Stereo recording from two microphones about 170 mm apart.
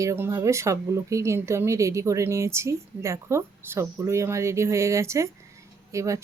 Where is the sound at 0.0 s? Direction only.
20° right (ahead or behind).